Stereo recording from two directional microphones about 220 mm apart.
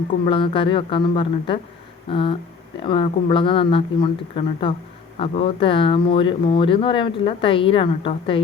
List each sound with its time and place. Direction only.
0.3 s speech: 25° left (ahead or behind)